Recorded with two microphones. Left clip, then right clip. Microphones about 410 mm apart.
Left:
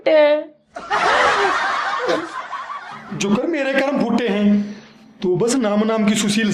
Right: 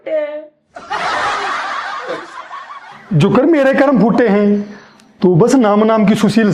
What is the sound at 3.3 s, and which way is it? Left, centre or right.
A man's voice, right.